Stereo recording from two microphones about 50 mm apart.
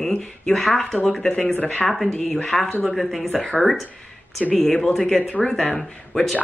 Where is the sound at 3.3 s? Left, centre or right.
Centre.